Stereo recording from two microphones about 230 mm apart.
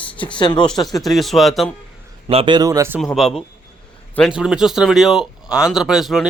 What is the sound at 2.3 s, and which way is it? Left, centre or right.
Speech, right.